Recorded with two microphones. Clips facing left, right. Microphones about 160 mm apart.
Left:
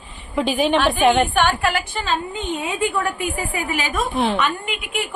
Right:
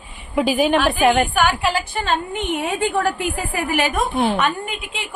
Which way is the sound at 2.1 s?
75° right (ahead or behind).